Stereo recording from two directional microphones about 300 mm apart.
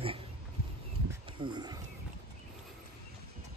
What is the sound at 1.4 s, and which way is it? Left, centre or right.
Speech, centre.